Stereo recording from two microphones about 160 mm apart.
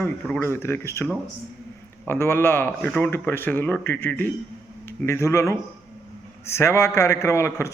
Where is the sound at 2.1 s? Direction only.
15° left (ahead or behind).